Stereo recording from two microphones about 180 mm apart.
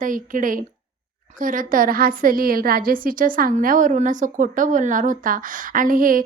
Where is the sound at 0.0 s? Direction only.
45° right (ahead or behind).